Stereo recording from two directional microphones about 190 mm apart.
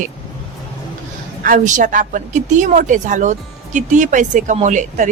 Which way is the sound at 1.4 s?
45° right (ahead or behind).